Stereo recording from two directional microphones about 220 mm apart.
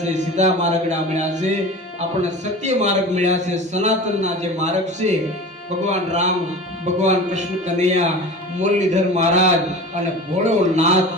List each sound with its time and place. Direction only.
0.0 s a man's voice: 30° right (ahead or behind)
2.6 s a man's voice: 30° right (ahead or behind)